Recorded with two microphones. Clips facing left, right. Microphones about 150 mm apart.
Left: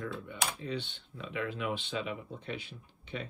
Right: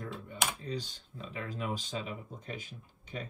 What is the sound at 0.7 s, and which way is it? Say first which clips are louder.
Speech: left 1 dB; 40° right (ahead or behind).